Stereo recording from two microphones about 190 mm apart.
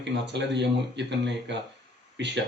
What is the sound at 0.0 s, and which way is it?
Speech, 65° right (ahead or behind).